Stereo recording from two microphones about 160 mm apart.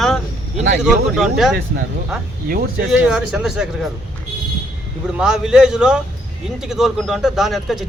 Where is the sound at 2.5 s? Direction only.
65° right (ahead or behind).